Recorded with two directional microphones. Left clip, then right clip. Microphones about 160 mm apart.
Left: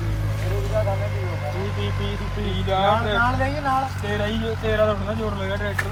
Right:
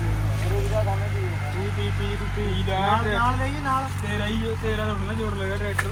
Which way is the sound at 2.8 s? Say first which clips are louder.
Left 3 dB; 60° left (ahead or behind).